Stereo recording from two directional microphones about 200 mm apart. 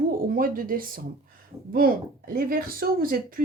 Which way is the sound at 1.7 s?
45° right (ahead or behind).